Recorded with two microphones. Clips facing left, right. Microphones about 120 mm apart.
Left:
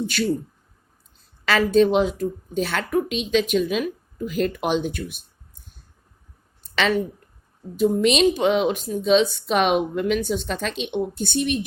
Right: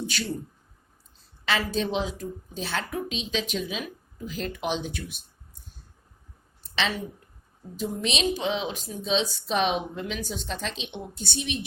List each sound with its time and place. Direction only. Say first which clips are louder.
1.5 s a woman's voice: left 10 dB; 55° left (ahead or behind)
6.6 s a sound: left 8 dB; 60° left (ahead or behind)
7.8 s a woman's voice: left 11 dB; 55° left (ahead or behind)